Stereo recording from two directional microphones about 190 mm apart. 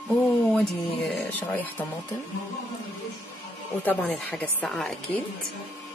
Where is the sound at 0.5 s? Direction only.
5° left (ahead or behind).